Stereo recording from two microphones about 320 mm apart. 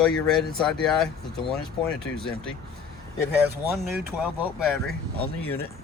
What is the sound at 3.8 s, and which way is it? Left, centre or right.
Speech, right.